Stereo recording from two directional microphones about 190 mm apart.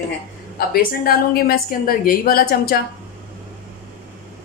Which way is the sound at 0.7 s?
50° left (ahead or behind).